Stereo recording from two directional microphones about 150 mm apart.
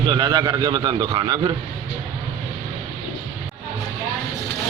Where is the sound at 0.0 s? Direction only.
30° right (ahead or behind).